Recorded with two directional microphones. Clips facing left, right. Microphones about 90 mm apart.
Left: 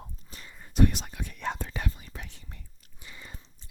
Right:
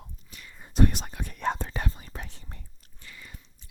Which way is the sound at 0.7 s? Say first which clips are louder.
Even; 35° right (ahead or behind).